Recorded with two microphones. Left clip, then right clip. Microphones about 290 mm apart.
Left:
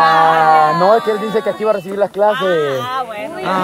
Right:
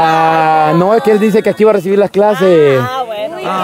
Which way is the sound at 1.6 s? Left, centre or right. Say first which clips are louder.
Right 7 dB; right.